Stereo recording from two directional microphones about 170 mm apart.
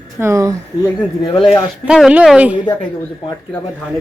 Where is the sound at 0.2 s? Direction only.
15° right (ahead or behind).